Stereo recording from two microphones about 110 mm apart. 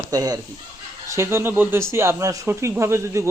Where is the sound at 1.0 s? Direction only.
25° right (ahead or behind).